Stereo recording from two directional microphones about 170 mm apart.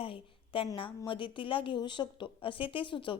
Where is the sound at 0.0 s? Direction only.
30° left (ahead or behind).